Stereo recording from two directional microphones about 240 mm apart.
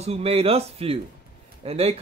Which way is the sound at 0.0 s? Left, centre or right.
Right.